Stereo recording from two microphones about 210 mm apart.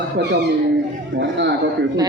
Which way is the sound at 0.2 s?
55° right (ahead or behind).